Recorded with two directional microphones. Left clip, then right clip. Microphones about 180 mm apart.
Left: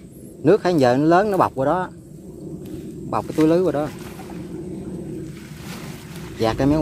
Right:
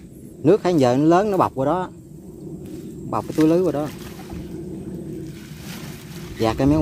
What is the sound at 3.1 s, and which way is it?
Speech, 15° right (ahead or behind).